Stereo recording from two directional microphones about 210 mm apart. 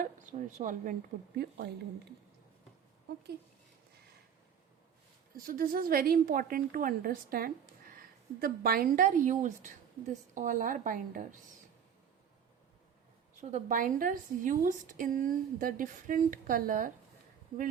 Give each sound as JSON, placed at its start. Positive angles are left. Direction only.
{"t": 0.0, "sound": "speech", "side_deg": -35}
{"t": 1.4, "sound": "a woman's voice", "side_deg": -50}
{"t": 5.5, "sound": "a woman's voice", "side_deg": -45}
{"t": 13.4, "sound": "a woman's voice", "side_deg": -35}